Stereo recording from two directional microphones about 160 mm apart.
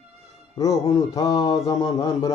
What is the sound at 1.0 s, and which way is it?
A man's voice, 25° left (ahead or behind).